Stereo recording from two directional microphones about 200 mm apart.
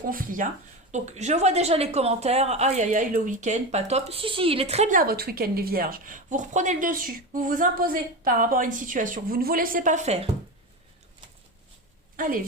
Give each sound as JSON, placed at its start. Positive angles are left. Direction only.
{"t": 0.1, "sound": "a woman's voice", "side_deg": -45}
{"t": 12.1, "sound": "a woman's voice", "side_deg": -40}